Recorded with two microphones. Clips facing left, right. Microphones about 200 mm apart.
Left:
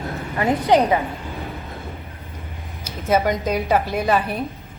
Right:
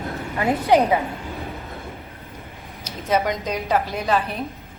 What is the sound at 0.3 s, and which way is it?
Speech, 10° right (ahead or behind).